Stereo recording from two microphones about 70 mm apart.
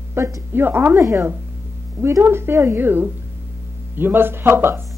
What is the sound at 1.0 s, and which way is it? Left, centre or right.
Speech, right.